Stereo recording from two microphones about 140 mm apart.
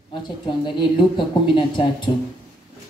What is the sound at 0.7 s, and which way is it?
Speech, 35° left (ahead or behind).